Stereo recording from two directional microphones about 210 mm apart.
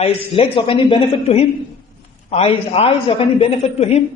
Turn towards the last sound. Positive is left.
turn(degrees=30)  # may be behind; listen again after turning